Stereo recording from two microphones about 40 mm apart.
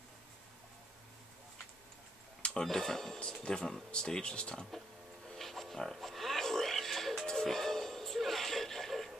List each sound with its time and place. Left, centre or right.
2.6 s speech: centre
5.4 s a sound: centre
5.9 s music: centre